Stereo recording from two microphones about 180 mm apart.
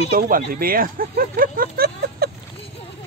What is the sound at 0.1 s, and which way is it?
Speech, 55° right (ahead or behind).